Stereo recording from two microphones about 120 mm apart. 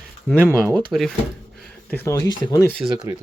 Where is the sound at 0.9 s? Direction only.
Centre (ahead or behind).